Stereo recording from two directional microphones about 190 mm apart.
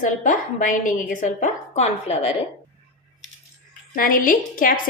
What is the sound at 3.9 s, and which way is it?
Speech, 45° left (ahead or behind).